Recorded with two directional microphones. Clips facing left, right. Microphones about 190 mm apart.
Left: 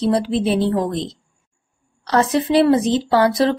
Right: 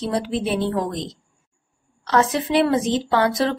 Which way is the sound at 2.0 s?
35° left (ahead or behind).